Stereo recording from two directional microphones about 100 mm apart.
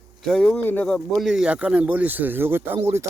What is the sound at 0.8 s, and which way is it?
Speech, 10° left (ahead or behind).